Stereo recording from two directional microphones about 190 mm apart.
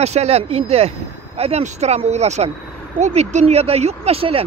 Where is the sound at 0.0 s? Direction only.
35° right (ahead or behind).